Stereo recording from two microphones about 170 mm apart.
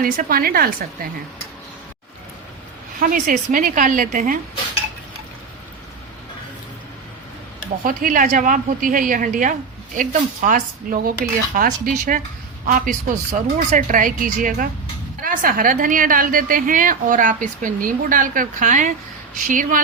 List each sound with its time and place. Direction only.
0.0 s speech: 60° right (ahead or behind)
3.0 s a woman's voice: 55° right (ahead or behind)
7.9 s a woman's voice: 55° right (ahead or behind)